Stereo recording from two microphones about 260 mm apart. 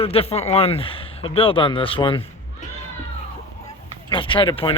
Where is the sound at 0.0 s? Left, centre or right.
Left.